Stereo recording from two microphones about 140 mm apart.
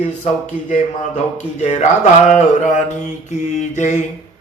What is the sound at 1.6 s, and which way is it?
Speech, 55° left (ahead or behind).